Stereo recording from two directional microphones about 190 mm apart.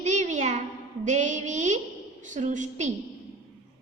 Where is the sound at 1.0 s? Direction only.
40° right (ahead or behind).